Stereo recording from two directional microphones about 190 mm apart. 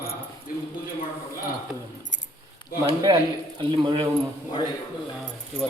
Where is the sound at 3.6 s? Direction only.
25° right (ahead or behind).